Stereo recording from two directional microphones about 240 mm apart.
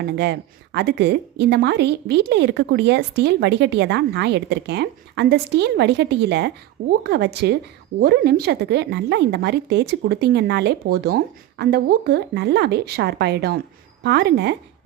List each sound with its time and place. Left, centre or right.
0.0 s a woman's voice: right